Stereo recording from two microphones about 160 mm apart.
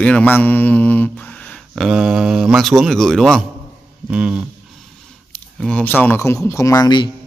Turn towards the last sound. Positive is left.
turn(degrees=25)  # may be behind; listen again after turning